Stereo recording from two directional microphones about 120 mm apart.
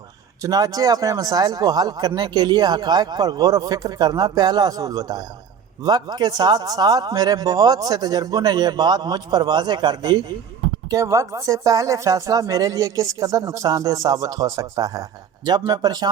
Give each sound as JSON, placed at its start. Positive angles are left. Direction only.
{"t": 0.4, "sound": "a man's voice", "side_deg": -30}